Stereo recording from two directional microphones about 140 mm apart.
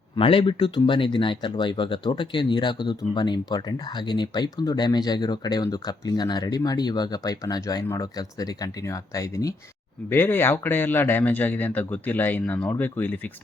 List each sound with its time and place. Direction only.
0.2 s speech: 40° left (ahead or behind); by 13.3 s 15° left (ahead or behind)